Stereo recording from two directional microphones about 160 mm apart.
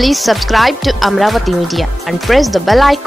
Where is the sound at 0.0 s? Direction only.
Centre (ahead or behind).